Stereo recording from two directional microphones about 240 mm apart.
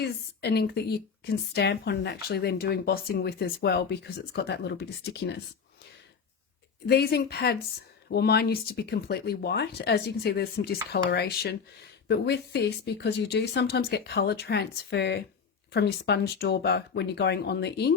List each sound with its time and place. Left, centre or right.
0.0 s a woman's voice: left
6.8 s a woman's voice: left